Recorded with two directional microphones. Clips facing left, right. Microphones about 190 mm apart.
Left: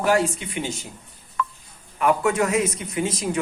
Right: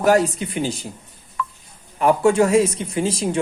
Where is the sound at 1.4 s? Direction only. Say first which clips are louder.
Left 1 dB; 55° left (ahead or behind).